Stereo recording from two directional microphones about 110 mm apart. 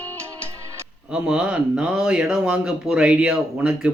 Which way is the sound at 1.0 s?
10° right (ahead or behind).